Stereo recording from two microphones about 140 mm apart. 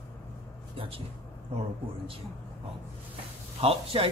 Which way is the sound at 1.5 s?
45° right (ahead or behind).